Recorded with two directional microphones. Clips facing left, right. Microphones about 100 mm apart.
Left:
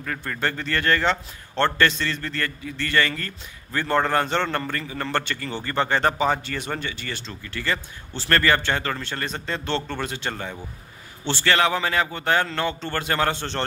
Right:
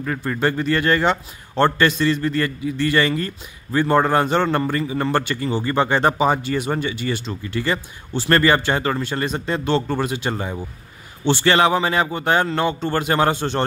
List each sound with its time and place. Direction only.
0.0 s a man's voice: 15° right (ahead or behind)